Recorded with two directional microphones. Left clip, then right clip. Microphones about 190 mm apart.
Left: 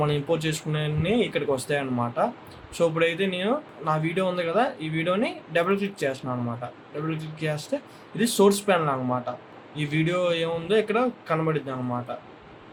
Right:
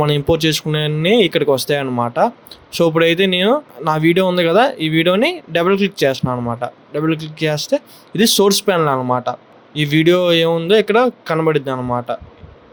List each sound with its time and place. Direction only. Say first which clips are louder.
0.0 s speech: right 10 dB; 45° right (ahead or behind)